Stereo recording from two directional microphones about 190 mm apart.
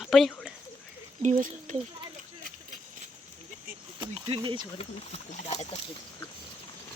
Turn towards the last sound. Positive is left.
turn(degrees=35)  # may be behind; listen again after turning